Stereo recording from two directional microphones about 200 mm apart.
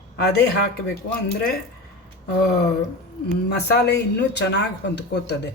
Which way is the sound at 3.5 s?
55° left (ahead or behind).